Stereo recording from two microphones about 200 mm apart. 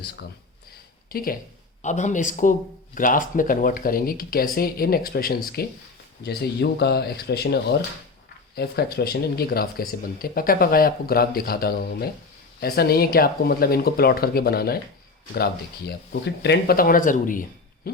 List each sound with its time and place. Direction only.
1.1 s speech: 45° left (ahead or behind)
16.4 s speech: 55° left (ahead or behind)
17.8 s hoot: 50° left (ahead or behind)